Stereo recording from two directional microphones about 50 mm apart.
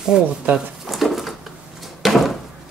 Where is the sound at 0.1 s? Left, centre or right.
Centre.